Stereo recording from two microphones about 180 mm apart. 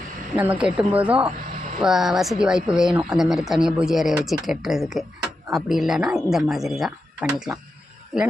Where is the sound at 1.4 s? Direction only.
45° right (ahead or behind).